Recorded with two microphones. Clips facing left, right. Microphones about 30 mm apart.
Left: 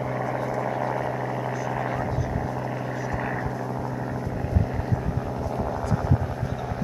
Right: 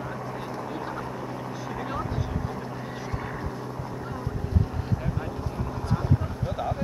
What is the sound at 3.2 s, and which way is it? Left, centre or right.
Vehicle, left.